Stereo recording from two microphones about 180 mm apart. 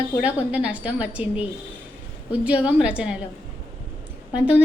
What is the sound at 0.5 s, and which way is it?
A woman's voice, 5° right (ahead or behind).